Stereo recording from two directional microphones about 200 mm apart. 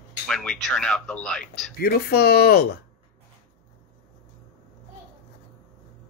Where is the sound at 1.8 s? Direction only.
50° left (ahead or behind).